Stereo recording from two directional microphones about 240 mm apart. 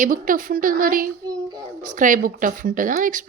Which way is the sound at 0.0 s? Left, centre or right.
Right.